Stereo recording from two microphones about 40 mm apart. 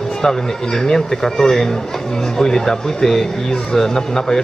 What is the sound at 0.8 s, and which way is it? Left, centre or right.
Speech, centre.